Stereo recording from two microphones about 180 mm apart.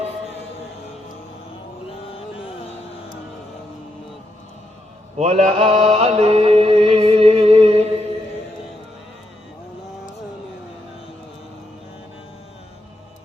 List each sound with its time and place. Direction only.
5.1 s mantra: 40° right (ahead or behind)